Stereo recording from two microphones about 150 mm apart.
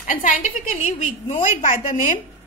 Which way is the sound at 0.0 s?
55° left (ahead or behind).